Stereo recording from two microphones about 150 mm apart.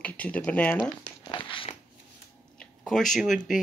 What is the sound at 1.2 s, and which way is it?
Biting, 35° left (ahead or behind).